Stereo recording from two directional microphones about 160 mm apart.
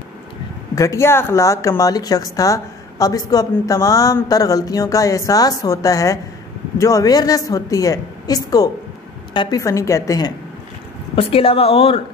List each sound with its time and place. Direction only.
0.7 s a woman's voice: 20° left (ahead or behind)
11.1 s speech: 35° left (ahead or behind)